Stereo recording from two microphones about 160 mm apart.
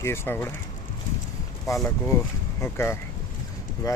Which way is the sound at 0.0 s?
15° left (ahead or behind).